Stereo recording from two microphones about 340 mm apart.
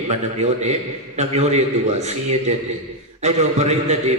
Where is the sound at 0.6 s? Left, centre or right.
Centre.